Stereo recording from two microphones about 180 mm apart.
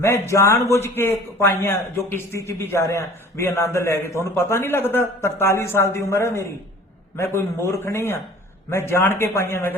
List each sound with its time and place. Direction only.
0.0 s a man's voice: 15° left (ahead or behind)